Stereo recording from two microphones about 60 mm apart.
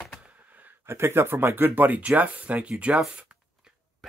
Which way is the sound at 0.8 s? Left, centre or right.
Right.